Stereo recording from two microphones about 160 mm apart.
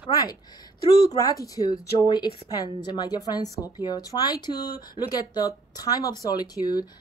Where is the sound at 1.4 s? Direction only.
20° left (ahead or behind).